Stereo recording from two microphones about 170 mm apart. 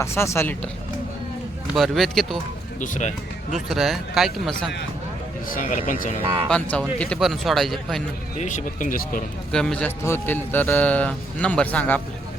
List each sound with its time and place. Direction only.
0.0 s a man's voice: 15° left (ahead or behind)
1.7 s speech: centre (ahead or behind)
2.8 s speech: 45° left (ahead or behind)
3.5 s speech: centre (ahead or behind)
5.5 s speech: 50° left (ahead or behind)
6.5 s a man's voice: 5° left (ahead or behind)
8.4 s speech: 45° left (ahead or behind)
9.5 s a man's voice: 5° left (ahead or behind)